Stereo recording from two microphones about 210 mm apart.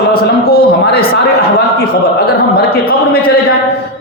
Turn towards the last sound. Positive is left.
turn(degrees=45)  # may be behind; listen again after turning